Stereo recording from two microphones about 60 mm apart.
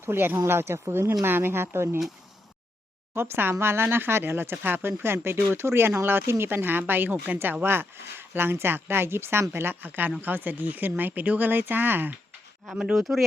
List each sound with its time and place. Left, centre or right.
0.0 s speech: right
3.2 s speech: right
12.7 s speech: centre